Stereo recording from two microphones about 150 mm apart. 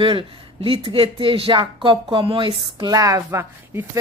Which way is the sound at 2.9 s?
20° right (ahead or behind).